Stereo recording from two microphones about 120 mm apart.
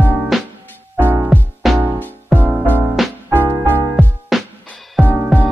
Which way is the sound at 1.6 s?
Centre (ahead or behind).